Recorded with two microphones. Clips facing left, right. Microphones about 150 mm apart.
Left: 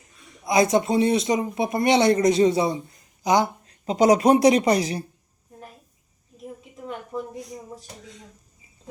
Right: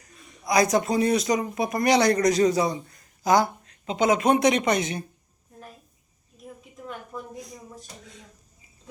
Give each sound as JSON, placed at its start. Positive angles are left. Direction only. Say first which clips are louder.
{"t": 0.0, "sound": "speech", "louder": "left 1 dB", "side_deg": 25}
{"t": 3.7, "sound": "speech", "louder": "left 9 dB", "side_deg": 35}
{"t": 7.1, "sound": "a sound", "louder": "left 8 dB", "side_deg": 25}